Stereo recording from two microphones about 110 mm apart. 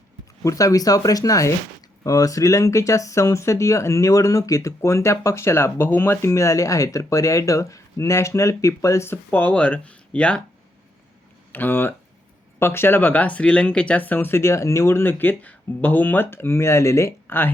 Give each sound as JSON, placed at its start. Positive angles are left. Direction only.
{"t": 0.4, "sound": "speech", "side_deg": 30}
{"t": 11.5, "sound": "speech", "side_deg": 20}